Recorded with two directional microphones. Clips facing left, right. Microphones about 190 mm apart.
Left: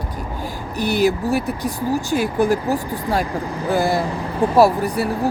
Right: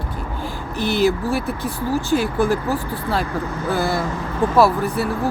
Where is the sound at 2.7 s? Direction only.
15° left (ahead or behind).